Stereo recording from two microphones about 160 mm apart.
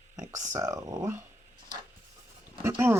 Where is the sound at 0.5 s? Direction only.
20° right (ahead or behind).